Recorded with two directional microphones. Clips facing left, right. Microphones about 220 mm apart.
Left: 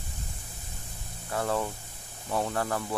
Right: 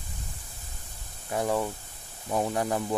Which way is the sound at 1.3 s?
15° right (ahead or behind).